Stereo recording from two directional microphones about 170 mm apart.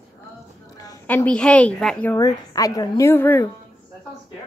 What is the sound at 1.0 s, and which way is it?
Speech, 10° left (ahead or behind).